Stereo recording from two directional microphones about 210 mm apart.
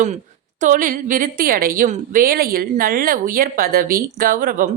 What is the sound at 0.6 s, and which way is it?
A woman's voice, 40° right (ahead or behind).